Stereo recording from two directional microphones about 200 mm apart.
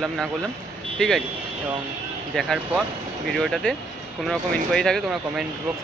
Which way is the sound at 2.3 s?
Centre (ahead or behind).